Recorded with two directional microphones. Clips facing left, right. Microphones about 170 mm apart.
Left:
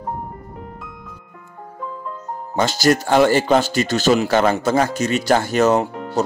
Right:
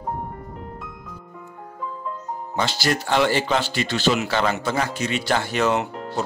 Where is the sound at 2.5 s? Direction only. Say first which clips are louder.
Left 7 dB; 45° left (ahead or behind).